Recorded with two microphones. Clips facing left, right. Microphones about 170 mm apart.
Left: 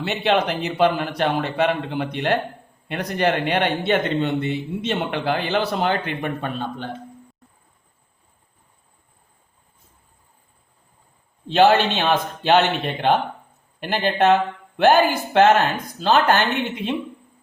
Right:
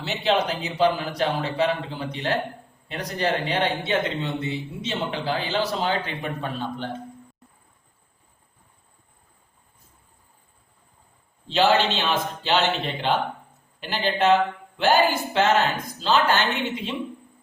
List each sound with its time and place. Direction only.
0.0 s a man's voice: 60° left (ahead or behind)
11.4 s speech: 55° left (ahead or behind)